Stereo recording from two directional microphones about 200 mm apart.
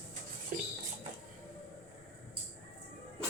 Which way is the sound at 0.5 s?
45° right (ahead or behind).